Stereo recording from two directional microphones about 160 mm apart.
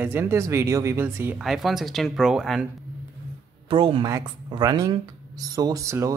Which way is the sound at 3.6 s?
35° right (ahead or behind).